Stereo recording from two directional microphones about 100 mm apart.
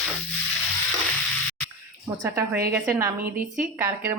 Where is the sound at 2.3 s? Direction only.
20° right (ahead or behind).